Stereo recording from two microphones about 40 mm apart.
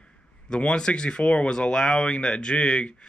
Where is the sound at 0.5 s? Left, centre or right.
Left.